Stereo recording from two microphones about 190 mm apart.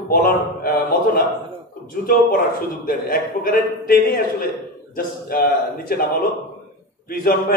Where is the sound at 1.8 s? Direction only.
50° left (ahead or behind).